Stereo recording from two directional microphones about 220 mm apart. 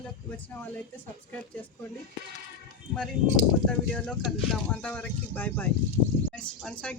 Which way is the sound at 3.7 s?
5° left (ahead or behind).